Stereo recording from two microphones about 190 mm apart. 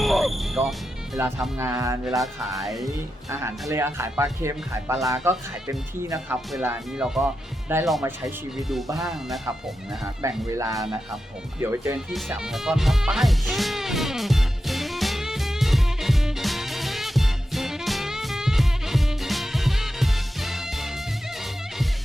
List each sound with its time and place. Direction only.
0.0 s music: centre (ahead or behind)
1.5 s speech: 10° right (ahead or behind)
2.0 s speech: centre (ahead or behind)
2.7 s speech: 15° right (ahead or behind); by 9.4 s centre (ahead or behind)
10.2 s speech: 15° right (ahead or behind)
11.9 s music: 5° right (ahead or behind)